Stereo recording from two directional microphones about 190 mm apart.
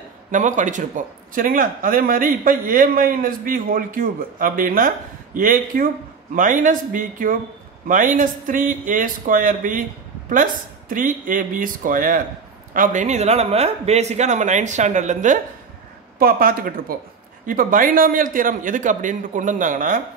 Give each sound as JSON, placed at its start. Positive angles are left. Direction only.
{"t": 0.3, "sound": "a man's voice", "side_deg": -40}